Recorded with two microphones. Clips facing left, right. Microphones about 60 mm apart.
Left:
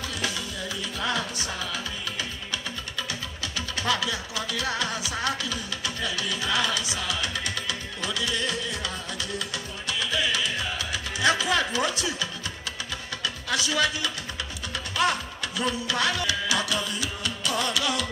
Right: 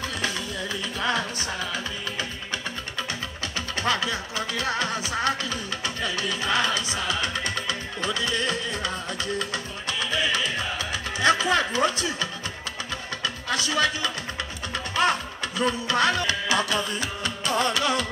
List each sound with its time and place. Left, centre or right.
0.9 s music: right